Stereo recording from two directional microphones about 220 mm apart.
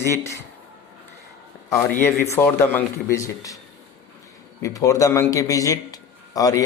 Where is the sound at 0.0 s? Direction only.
10° left (ahead or behind).